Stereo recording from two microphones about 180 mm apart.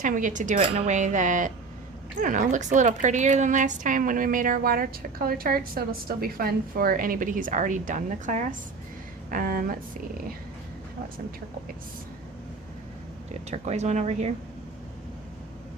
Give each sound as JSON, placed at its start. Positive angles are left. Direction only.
{"t": 0.0, "sound": "a woman's voice", "side_deg": -45}
{"t": 13.5, "sound": "speech", "side_deg": -40}